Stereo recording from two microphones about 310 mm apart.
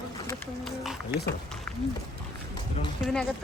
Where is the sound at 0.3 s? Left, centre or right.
Centre.